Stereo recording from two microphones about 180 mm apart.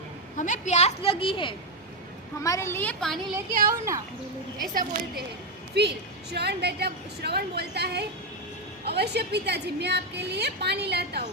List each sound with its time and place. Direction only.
0.3 s a woman's voice: 45° left (ahead or behind)
2.4 s a woman's voice: 15° left (ahead or behind)
4.7 s speech: 50° right (ahead or behind)
5.7 s a woman's voice: 65° right (ahead or behind)